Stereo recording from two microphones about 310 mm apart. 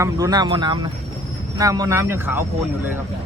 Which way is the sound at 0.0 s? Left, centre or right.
Centre.